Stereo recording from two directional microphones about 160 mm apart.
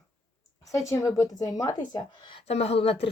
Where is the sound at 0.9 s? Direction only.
20° left (ahead or behind).